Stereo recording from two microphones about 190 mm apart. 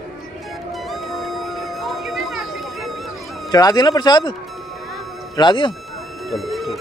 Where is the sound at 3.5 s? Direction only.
20° left (ahead or behind).